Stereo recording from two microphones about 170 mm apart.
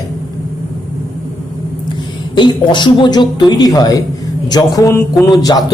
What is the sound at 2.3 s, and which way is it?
Speech, 25° left (ahead or behind).